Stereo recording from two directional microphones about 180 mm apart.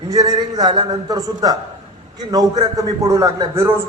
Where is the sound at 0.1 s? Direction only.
20° right (ahead or behind).